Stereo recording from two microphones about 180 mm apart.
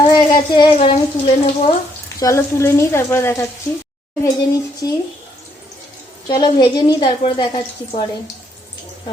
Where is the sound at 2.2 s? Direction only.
15° left (ahead or behind).